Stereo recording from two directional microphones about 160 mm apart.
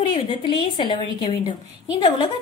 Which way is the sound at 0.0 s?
30° left (ahead or behind).